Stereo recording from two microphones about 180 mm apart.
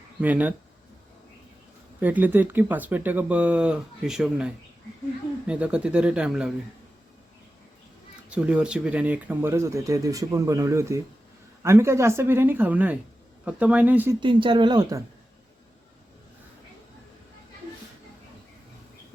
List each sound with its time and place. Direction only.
0.2 s speech: 10° right (ahead or behind)
2.0 s speech: 10° right (ahead or behind)
5.5 s speech: 5° right (ahead or behind)
8.3 s speech: 5° right (ahead or behind)
14.2 s speech: 25° right (ahead or behind)